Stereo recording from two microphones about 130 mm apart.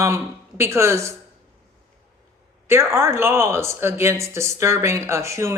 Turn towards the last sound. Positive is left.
turn(degrees=-20)  # may be behind; listen again after turning